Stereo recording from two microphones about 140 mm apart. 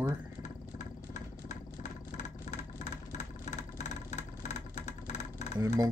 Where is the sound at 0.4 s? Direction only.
60° left (ahead or behind).